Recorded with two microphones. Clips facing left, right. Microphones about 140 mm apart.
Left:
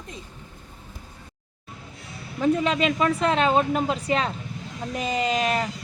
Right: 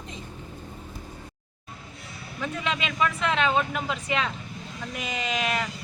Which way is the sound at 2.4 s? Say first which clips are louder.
Left 9 dB; 35° left (ahead or behind).